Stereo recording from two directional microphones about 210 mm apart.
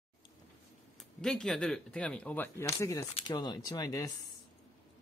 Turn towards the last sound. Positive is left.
turn(degrees=15)  # may be behind; listen again after turning